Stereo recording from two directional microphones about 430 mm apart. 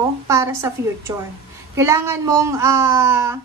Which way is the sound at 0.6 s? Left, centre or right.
Centre.